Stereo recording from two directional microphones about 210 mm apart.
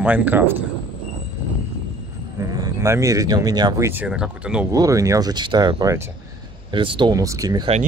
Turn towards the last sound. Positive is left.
turn(degrees=-15)  # may be behind; listen again after turning